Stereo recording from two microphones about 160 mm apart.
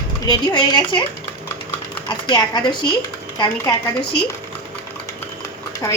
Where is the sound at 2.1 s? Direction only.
25° left (ahead or behind).